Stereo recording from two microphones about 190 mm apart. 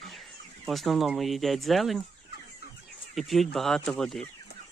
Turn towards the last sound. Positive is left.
turn(degrees=5)  # may be behind; listen again after turning